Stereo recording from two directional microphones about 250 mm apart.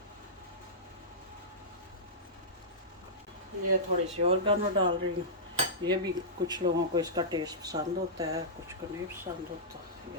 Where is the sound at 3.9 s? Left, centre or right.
Right.